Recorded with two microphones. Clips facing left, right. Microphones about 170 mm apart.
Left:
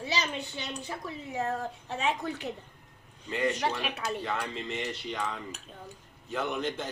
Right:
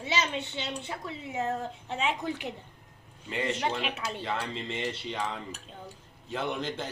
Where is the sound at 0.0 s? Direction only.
25° right (ahead or behind).